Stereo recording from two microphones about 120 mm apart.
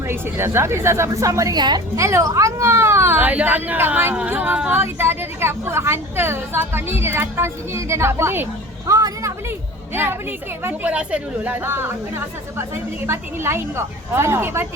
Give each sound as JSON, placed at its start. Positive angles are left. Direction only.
{"t": 0.1, "sound": "speech", "side_deg": -20}
{"t": 2.0, "sound": "speech", "side_deg": -25}
{"t": 8.9, "sound": "a sound", "side_deg": -30}
{"t": 9.9, "sound": "speech", "side_deg": -20}